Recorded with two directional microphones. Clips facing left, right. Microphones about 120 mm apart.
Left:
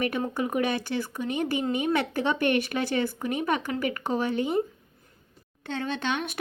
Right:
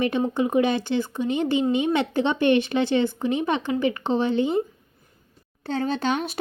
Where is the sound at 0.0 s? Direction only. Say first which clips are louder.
Right 5 dB; 25° right (ahead or behind).